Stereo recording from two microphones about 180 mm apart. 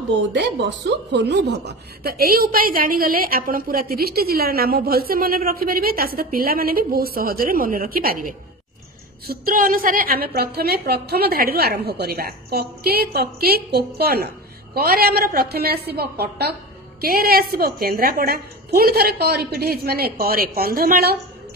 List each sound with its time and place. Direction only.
0.1 s speech: 75° right (ahead or behind); by 21.2 s 60° right (ahead or behind)